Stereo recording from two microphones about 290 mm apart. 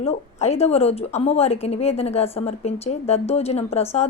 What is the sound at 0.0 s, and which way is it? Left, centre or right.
Speech, left.